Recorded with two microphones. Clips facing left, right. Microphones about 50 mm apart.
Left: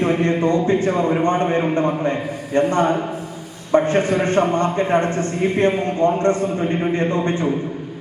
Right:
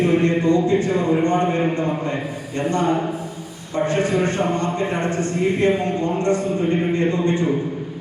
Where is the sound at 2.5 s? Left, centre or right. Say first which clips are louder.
Left 3 dB; left.